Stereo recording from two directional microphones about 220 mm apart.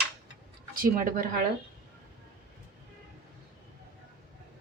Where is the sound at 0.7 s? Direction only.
40° right (ahead or behind).